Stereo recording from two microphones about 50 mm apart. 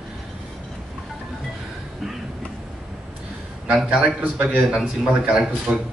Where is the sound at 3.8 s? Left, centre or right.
Right.